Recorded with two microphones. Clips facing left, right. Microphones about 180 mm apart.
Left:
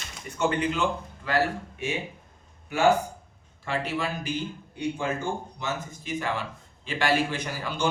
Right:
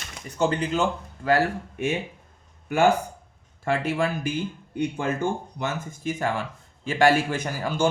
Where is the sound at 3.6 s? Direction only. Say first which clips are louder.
Right 5 dB; 50° right (ahead or behind).